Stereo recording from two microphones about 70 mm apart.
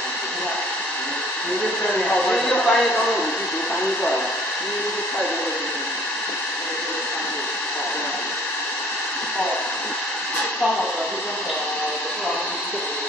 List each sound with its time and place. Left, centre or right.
2.0 s speech: centre